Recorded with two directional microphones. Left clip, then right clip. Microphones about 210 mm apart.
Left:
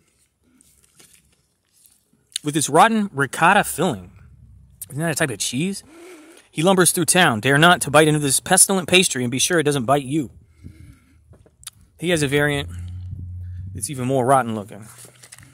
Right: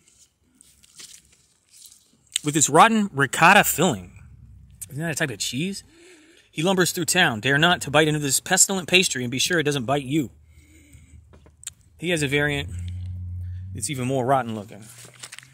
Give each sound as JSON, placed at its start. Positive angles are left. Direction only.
{"t": 2.4, "sound": "speech", "side_deg": 5}
{"t": 4.8, "sound": "speech", "side_deg": 15}
{"t": 10.1, "sound": "a sound", "side_deg": 0}
{"t": 11.3, "sound": "a sound", "side_deg": 15}
{"t": 13.7, "sound": "speech", "side_deg": 0}
{"t": 14.1, "sound": "speech", "side_deg": 15}
{"t": 15.2, "sound": "walk", "side_deg": 10}